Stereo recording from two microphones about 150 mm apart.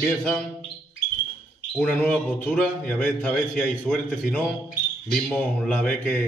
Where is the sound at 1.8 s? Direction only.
5° left (ahead or behind).